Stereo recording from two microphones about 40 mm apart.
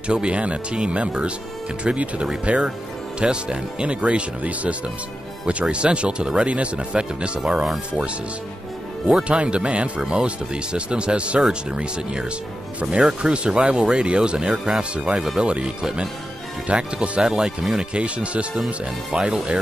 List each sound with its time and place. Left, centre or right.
0.1 s speech: right
2.5 s speech: right
3.2 s speech: right
9.3 s speech: right
16.6 s speech: right
17.2 s speech: centre
17.7 s speech: right